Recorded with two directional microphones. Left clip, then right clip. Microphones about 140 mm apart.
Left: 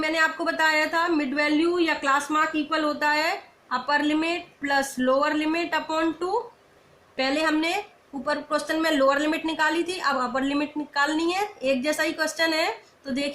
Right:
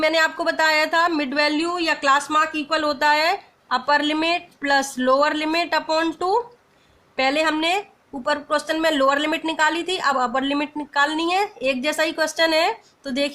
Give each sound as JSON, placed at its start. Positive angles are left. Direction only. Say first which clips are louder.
{"t": 0.0, "sound": "a woman's voice", "louder": "right 4 dB", "side_deg": -60}